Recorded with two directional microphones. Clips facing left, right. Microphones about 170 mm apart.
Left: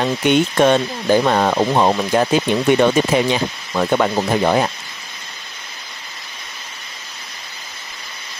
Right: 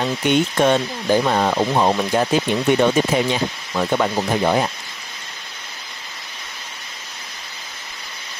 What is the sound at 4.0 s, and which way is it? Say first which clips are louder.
Speech: left 2 dB; 65° left (ahead or behind).